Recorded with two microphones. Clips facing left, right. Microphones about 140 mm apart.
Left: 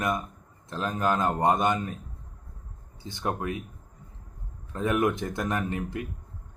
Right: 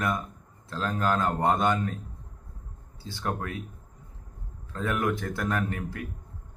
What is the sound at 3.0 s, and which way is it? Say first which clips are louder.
Speech: left 1 dB; 20° left (ahead or behind).